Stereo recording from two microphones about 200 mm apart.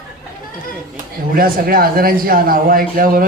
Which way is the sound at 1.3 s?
45° right (ahead or behind).